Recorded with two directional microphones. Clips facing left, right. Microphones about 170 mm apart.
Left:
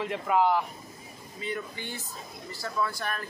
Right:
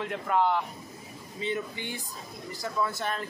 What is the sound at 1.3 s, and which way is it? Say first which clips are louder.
Speech: right 3 dB; 20° right (ahead or behind).